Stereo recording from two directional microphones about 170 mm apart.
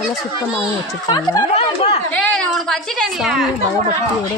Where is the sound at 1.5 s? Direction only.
40° left (ahead or behind).